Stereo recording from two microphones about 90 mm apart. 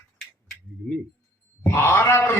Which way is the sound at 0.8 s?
Centre (ahead or behind).